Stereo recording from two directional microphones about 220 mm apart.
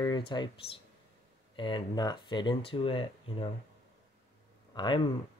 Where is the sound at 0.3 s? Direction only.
20° left (ahead or behind).